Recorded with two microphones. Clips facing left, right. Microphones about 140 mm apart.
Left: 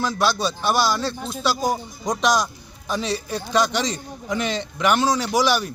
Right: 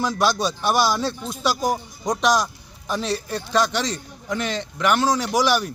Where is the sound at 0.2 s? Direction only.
15° right (ahead or behind).